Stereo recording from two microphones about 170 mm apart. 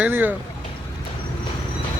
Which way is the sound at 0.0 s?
10° right (ahead or behind).